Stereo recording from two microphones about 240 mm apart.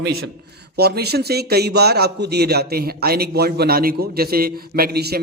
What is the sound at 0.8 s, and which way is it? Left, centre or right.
A man's voice, right.